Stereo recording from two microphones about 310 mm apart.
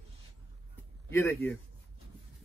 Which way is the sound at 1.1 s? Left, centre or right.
Centre.